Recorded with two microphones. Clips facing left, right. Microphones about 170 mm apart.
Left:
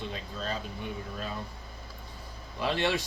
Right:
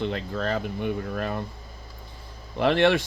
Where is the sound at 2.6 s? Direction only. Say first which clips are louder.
Right 9 dB; 65° right (ahead or behind).